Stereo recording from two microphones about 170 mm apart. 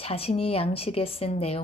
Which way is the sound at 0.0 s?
35° left (ahead or behind).